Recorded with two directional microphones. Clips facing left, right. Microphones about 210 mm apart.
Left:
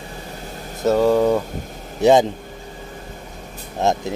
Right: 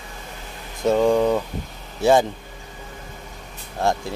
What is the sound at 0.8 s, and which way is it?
Speech, 5° left (ahead or behind).